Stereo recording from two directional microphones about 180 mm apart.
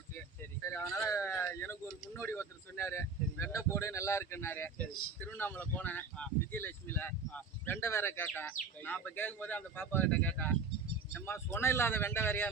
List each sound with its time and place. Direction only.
0.6 s speech: 15° left (ahead or behind)